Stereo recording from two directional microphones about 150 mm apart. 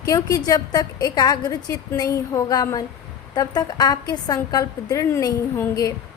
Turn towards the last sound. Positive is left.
turn(degrees=25)  # may be behind; listen again after turning